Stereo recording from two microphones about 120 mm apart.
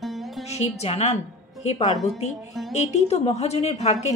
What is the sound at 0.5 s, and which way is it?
A woman's voice, 65° left (ahead or behind).